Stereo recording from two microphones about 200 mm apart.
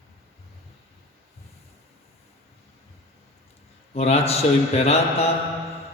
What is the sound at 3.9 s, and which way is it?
A man's voice, 30° left (ahead or behind).